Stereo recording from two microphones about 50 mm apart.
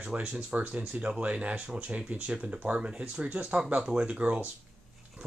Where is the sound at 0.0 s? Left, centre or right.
Right.